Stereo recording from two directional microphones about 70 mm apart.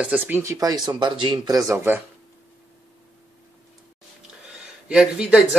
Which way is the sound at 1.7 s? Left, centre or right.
Right.